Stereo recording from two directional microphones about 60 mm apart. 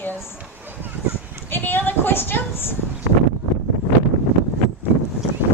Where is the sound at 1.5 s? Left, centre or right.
Left.